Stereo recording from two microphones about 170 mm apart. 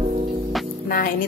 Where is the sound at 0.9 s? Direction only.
55° left (ahead or behind).